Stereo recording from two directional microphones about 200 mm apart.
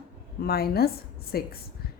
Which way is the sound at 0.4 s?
50° left (ahead or behind).